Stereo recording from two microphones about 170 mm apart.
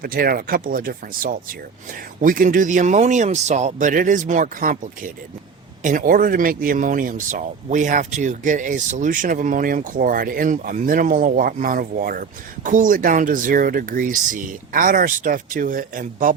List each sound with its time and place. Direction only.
0.0 s speech: 60° right (ahead or behind)